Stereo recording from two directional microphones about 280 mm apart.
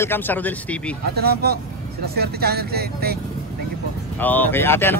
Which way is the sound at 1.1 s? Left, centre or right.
Right.